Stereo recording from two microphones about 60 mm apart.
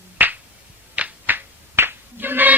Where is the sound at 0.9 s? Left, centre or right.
Right.